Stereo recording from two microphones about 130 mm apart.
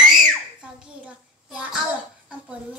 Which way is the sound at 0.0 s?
5° right (ahead or behind).